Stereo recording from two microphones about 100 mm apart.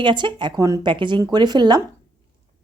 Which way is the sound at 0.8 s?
55° right (ahead or behind).